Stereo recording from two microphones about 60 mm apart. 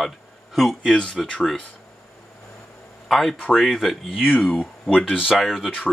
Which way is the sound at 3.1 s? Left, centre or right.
Centre.